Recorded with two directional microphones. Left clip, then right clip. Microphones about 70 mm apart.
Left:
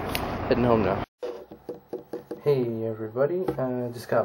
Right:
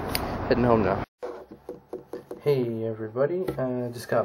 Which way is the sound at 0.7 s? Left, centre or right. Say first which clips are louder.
Right 1 dB; right.